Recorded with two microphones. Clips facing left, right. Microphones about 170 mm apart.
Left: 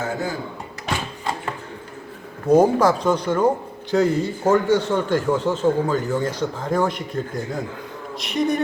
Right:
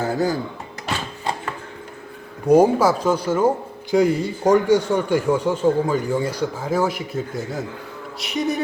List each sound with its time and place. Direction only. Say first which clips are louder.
0.0 s speech: right 5 dB; 35° right (ahead or behind)
2.5 s a man's voice: right 1 dB; 10° right (ahead or behind)